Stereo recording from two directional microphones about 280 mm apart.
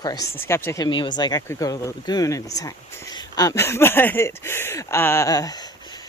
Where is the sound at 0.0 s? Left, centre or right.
Centre.